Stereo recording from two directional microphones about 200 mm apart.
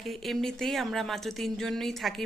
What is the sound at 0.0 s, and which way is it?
A woman's voice, centre (ahead or behind).